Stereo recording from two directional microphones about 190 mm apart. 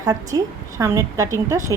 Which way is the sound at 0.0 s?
20° right (ahead or behind).